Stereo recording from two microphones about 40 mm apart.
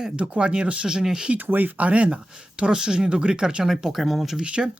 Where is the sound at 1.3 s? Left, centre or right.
Right.